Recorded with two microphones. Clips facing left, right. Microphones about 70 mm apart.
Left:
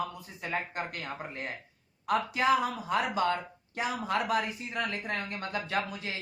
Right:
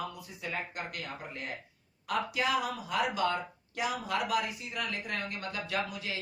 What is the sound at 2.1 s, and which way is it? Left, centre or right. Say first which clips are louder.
Speech: left 4 dB; left.